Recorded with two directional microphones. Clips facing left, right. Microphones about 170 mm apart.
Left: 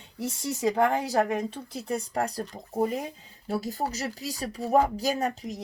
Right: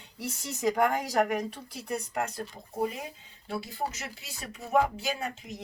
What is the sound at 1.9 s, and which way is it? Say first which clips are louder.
Speech: left 3 dB; 35° left (ahead or behind).